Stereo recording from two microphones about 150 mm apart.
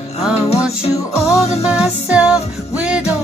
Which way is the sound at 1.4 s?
45° left (ahead or behind).